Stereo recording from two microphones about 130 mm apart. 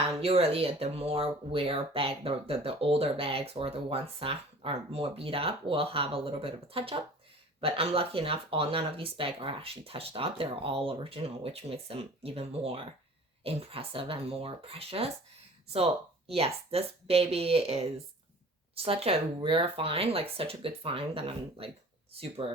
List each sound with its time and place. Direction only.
0.0 s speech: 50° right (ahead or behind)